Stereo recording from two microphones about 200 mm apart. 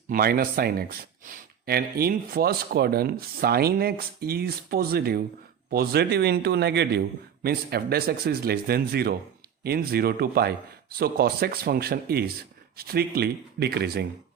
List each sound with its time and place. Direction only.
0.1 s speech: 50° right (ahead or behind)